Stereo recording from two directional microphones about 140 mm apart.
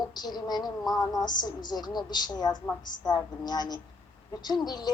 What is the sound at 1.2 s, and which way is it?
A woman's voice, 30° left (ahead or behind).